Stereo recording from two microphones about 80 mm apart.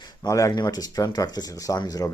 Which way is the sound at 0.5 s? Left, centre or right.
Left.